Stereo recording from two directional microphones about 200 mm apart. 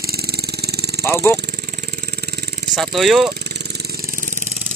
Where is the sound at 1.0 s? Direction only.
10° left (ahead or behind).